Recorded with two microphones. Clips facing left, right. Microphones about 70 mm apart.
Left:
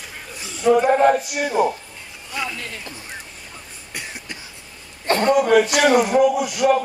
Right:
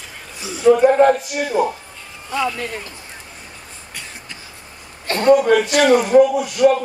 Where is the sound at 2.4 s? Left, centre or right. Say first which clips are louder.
Right 7 dB; right.